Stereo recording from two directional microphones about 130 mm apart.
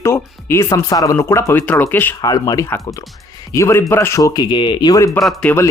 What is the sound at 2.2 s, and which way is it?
Speech, 30° left (ahead or behind).